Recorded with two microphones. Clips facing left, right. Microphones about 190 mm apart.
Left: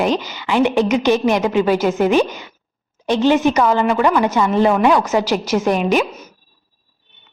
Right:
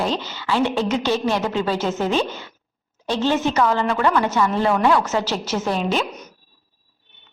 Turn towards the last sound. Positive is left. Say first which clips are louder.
# left 6 dB
turn(degrees=10)  # may be behind; listen again after turning